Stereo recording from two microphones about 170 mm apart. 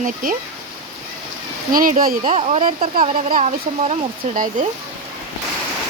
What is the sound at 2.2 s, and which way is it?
Speech, 35° right (ahead or behind).